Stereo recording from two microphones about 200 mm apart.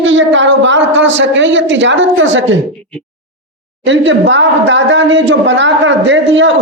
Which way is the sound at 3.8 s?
65° right (ahead or behind).